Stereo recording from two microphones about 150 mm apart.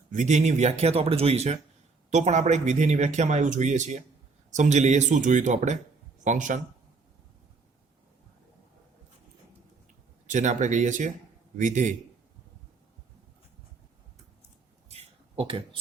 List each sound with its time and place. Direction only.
0.1 s speech: 55° right (ahead or behind)
10.2 s speech: 55° right (ahead or behind)
14.8 s a sound: 40° right (ahead or behind)